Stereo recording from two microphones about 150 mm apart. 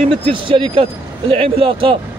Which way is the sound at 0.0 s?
35° right (ahead or behind).